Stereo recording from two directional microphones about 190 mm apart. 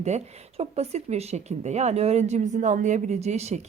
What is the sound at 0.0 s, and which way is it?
Speech, 35° right (ahead or behind).